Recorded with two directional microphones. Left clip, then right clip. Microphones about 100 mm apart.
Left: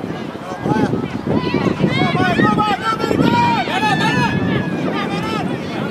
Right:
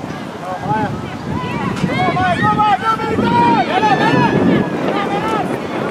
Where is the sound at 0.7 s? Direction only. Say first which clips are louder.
Left 2 dB; 35° left (ahead or behind).